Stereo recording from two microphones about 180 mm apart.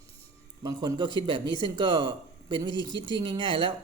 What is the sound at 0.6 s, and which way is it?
Speech, 20° right (ahead or behind).